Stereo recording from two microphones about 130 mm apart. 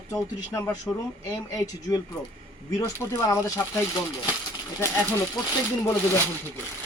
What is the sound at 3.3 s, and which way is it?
Speech, 25° left (ahead or behind).